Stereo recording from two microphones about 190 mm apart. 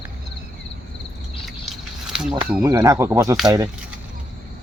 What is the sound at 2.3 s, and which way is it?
Speech, 20° right (ahead or behind).